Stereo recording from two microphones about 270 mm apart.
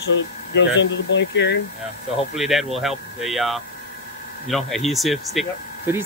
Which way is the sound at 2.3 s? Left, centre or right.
Centre.